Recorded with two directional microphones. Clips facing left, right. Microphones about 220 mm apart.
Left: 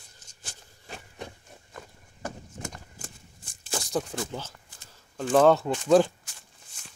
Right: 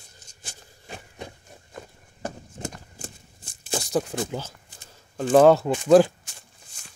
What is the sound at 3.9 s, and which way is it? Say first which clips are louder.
Speech: right 4 dB; 10° right (ahead or behind).